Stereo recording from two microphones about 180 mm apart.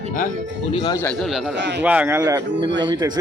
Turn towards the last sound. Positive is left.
turn(degrees=-25)  # may be behind; listen again after turning